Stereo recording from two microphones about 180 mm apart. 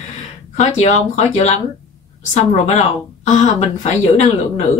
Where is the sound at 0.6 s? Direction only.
40° left (ahead or behind).